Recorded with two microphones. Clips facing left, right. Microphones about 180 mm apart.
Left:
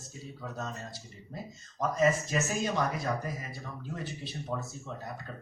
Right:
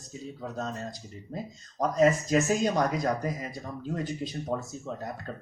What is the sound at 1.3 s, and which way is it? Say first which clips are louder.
Speech: right 5 dB; 50° right (ahead or behind).